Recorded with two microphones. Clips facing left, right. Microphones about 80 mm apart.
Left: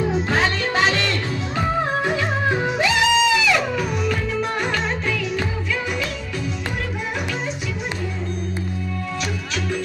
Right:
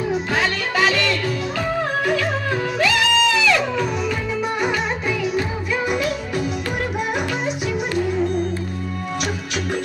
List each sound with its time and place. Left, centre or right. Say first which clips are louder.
0.1 s music: even; left; by 3.8 s centre